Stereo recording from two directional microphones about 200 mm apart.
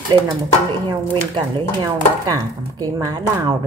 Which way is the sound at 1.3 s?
20° right (ahead or behind).